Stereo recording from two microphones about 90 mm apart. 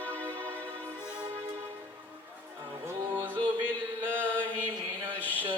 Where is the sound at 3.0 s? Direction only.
45° right (ahead or behind).